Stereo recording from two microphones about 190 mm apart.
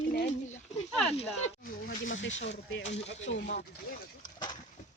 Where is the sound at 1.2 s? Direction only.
35° left (ahead or behind).